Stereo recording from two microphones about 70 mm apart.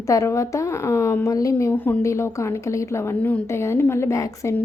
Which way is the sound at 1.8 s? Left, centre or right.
Left.